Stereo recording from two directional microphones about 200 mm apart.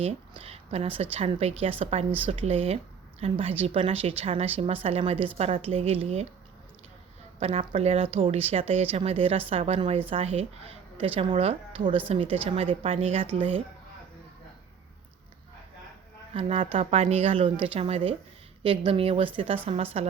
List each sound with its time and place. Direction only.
0.0 s a woman's voice: 30° right (ahead or behind)
7.3 s a woman's voice: 30° right (ahead or behind)
16.3 s a woman's voice: 25° right (ahead or behind)